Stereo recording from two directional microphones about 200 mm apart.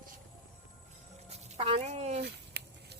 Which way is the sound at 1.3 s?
30° right (ahead or behind).